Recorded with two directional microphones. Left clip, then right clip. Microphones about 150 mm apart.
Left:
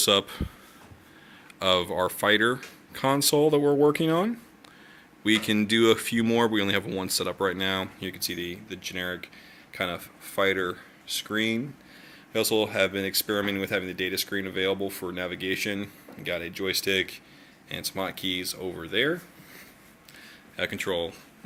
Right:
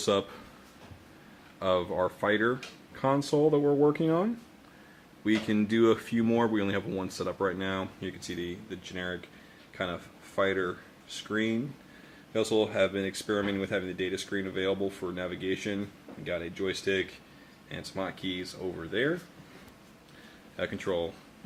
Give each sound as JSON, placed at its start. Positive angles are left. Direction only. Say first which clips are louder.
{"t": 0.0, "sound": "a man's voice", "louder": "left 5 dB", "side_deg": 20}
{"t": 1.5, "sound": "speech", "louder": "left 4 dB", "side_deg": 25}
{"t": 16.8, "sound": "speech", "louder": "left 4 dB", "side_deg": 30}
{"t": 20.6, "sound": "speech", "louder": "left 3 dB", "side_deg": 20}